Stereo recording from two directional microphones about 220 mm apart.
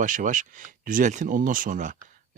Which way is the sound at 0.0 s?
35° right (ahead or behind).